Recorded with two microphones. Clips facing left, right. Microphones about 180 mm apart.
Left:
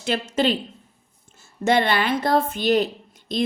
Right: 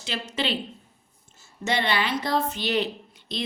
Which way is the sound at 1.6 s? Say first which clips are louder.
Left 6 dB; 50° left (ahead or behind).